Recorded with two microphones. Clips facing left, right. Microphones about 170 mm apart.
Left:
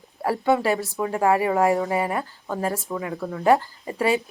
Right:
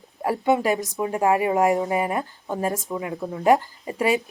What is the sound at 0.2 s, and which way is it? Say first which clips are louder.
Speech: even; 15° right (ahead or behind).